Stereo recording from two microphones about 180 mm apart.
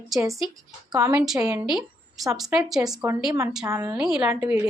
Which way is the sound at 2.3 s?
Centre (ahead or behind).